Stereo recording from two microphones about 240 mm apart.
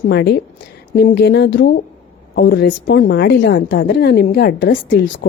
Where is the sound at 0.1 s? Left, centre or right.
Left.